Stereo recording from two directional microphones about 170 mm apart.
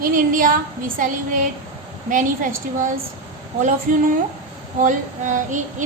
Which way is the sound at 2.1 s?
50° right (ahead or behind).